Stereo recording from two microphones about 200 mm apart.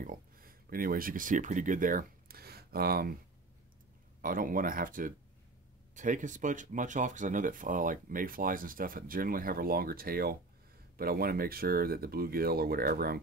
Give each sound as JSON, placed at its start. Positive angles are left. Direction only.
{"t": 0.0, "sound": "speech", "side_deg": -45}
{"t": 4.2, "sound": "speech", "side_deg": -45}